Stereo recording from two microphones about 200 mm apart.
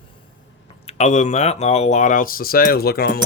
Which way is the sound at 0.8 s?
35° left (ahead or behind).